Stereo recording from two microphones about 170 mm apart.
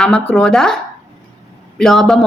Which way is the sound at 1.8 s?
Centre (ahead or behind).